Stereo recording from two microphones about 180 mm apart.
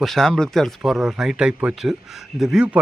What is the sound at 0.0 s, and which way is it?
A man's voice, centre (ahead or behind).